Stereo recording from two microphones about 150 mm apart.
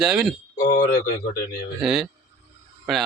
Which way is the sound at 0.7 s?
55° left (ahead or behind).